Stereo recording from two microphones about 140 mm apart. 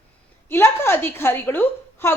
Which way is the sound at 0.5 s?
15° left (ahead or behind).